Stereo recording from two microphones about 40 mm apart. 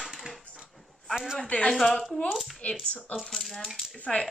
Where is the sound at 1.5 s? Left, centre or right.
Left.